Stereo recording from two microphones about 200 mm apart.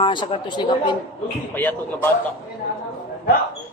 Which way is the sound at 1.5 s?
10° left (ahead or behind).